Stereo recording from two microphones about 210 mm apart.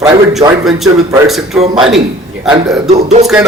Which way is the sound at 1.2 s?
Centre (ahead or behind).